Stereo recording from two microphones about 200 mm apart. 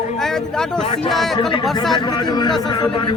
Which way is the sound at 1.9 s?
20° left (ahead or behind).